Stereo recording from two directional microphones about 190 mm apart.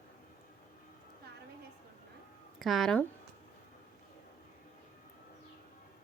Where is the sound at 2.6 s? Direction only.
Centre (ahead or behind).